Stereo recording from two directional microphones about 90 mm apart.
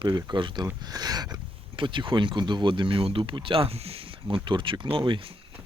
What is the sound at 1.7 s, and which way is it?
Speech, 70° right (ahead or behind).